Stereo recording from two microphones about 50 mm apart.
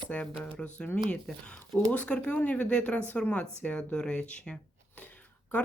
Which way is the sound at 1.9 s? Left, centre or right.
Left.